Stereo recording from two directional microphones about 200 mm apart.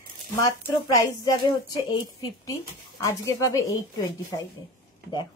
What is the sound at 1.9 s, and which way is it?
A woman's voice, 20° left (ahead or behind).